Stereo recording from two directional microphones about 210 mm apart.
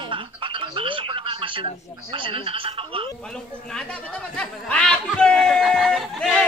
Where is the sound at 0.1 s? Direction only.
25° right (ahead or behind).